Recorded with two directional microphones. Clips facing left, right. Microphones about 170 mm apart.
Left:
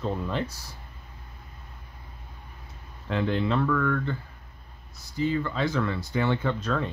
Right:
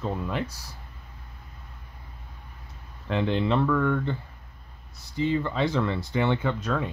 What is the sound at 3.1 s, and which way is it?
Speech, 20° right (ahead or behind).